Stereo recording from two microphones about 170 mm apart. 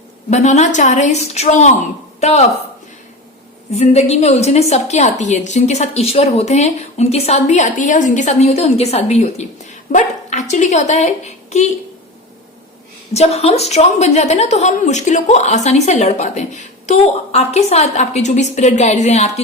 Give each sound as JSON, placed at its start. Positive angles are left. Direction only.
{"t": 0.3, "sound": "a woman's voice", "side_deg": 40}
{"t": 3.8, "sound": "a woman's voice", "side_deg": 40}
{"t": 13.1, "sound": "a woman's voice", "side_deg": 40}